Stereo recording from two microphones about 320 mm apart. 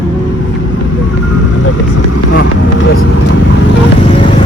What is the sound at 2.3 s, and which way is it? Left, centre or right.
Speech, left.